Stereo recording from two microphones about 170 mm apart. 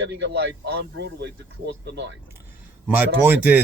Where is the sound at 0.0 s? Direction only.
90° right.